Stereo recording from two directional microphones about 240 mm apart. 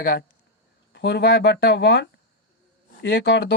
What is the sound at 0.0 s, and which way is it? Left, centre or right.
Speech, left.